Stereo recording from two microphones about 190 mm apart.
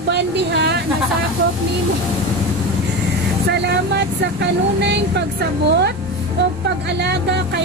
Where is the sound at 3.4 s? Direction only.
60° right (ahead or behind).